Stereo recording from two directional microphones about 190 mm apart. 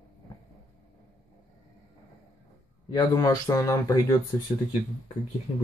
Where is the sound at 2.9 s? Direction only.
20° left (ahead or behind).